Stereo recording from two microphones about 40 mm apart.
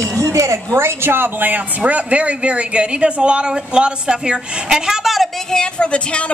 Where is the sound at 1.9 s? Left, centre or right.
Right; by 5.3 s centre.